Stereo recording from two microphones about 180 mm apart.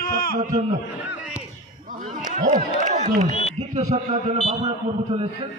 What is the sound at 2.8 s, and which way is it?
A man's voice, 45° right (ahead or behind).